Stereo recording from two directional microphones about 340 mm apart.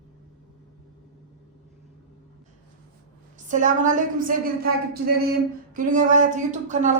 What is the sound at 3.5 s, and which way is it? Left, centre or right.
Speech, right.